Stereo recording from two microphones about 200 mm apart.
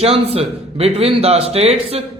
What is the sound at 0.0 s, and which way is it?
Speech, 30° right (ahead or behind).